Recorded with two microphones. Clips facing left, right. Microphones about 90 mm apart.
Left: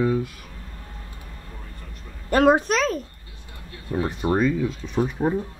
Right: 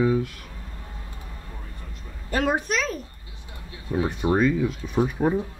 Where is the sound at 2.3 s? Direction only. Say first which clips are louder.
Left 7 dB; 45° left (ahead or behind).